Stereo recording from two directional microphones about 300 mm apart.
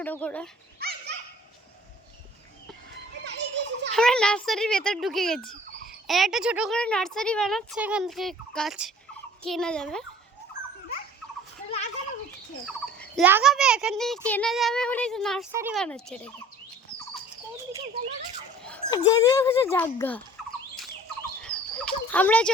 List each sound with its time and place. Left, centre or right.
0.0 s speech: centre
0.8 s dog: right
3.3 s children playing: right
3.9 s speech: centre
12.6 s speech: centre
18.6 s speech: centre
21.4 s turkey: centre